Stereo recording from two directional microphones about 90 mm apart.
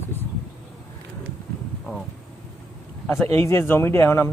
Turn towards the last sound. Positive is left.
turn(degrees=30)  # may be behind; listen again after turning